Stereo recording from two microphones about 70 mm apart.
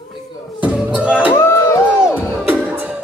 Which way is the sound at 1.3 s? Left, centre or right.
Left.